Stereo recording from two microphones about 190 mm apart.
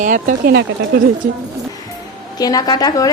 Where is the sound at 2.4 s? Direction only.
20° left (ahead or behind).